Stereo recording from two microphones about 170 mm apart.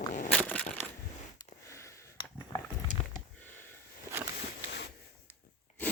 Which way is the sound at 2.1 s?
30° left (ahead or behind).